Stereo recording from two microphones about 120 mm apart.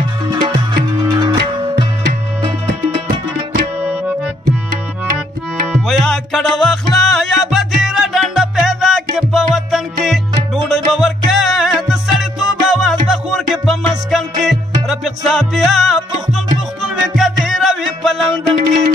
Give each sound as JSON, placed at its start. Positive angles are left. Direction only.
{"t": 0.3, "sound": "music", "side_deg": -35}
{"t": 3.8, "sound": "music", "side_deg": -15}
{"t": 5.7, "sound": "music", "side_deg": 0}